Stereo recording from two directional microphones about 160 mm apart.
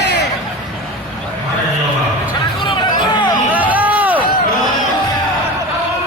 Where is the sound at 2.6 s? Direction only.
30° left (ahead or behind).